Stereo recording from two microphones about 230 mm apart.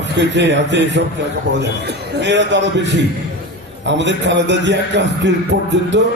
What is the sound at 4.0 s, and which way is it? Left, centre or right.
Speech, right.